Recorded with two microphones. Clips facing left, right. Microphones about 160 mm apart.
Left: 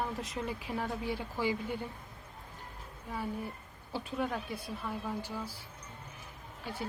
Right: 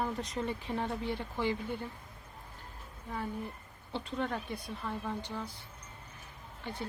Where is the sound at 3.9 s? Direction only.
5° left (ahead or behind).